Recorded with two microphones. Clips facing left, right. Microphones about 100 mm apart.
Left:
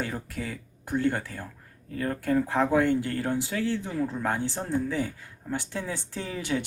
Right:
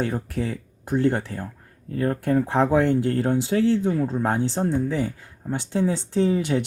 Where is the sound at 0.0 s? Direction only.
35° right (ahead or behind).